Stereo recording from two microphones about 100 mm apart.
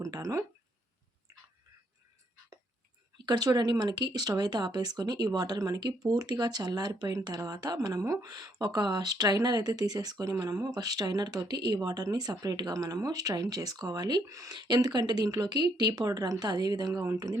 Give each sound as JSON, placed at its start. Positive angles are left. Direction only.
{"t": 0.0, "sound": "a sound", "side_deg": -35}
{"t": 3.2, "sound": "speech", "side_deg": -40}
{"t": 14.7, "sound": "speech", "side_deg": -45}